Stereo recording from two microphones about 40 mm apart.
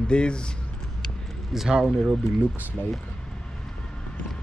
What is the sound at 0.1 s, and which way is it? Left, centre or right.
Speech, left.